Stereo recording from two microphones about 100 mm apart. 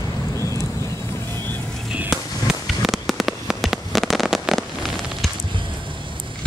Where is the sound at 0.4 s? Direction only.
30° left (ahead or behind).